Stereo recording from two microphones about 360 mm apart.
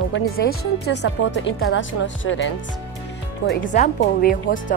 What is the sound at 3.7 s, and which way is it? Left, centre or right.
Speech, left.